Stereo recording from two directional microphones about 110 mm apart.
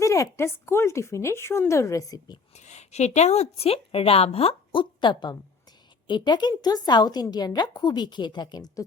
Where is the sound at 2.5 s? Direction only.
90° left.